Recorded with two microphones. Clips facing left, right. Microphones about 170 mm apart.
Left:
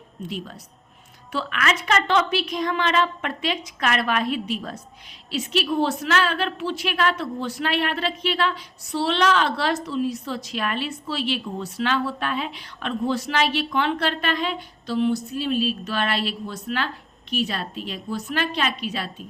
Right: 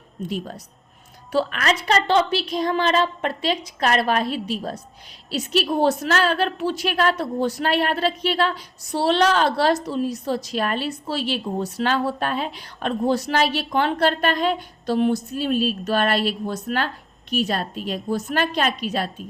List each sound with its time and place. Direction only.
0.3 s a woman's voice: 40° right (ahead or behind)